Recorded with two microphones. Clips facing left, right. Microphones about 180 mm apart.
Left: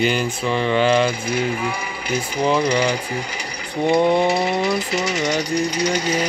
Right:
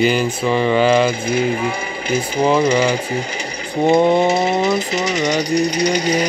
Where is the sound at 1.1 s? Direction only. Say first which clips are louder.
Right 4 dB; 25° right (ahead or behind).